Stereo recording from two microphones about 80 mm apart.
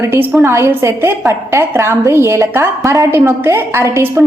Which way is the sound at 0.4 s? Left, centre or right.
Right.